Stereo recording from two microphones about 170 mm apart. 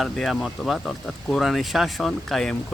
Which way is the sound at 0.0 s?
Centre (ahead or behind).